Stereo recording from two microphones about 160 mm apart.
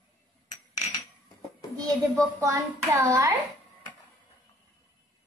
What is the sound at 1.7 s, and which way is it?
A child's voice, 20° right (ahead or behind).